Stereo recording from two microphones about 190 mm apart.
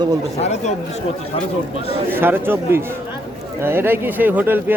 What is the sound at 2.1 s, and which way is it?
Speech, 10° right (ahead or behind).